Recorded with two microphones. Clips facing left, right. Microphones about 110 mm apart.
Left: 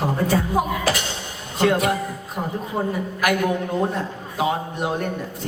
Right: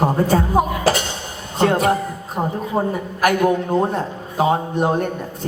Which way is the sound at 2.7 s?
45° right (ahead or behind).